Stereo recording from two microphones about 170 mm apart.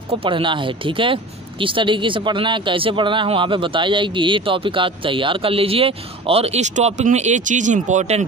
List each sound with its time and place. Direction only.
0.1 s speech: 30° right (ahead or behind)